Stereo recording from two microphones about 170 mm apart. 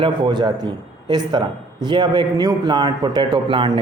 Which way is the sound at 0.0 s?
25° right (ahead or behind).